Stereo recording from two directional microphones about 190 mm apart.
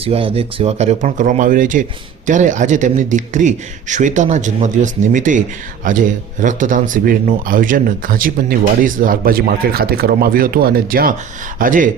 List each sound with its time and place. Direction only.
0.0 s a man's voice: 30° right (ahead or behind); by 11.9 s 45° right (ahead or behind)